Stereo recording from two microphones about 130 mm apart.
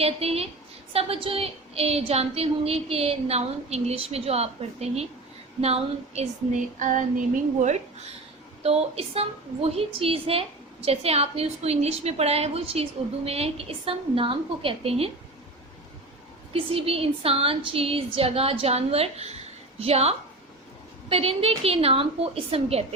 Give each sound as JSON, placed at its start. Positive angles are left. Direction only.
{"t": 0.0, "sound": "a woman's voice", "side_deg": -50}
{"t": 6.7, "sound": "female singing", "side_deg": -75}
{"t": 7.6, "sound": "a woman's voice", "side_deg": -60}
{"t": 16.5, "sound": "a woman's voice", "side_deg": -45}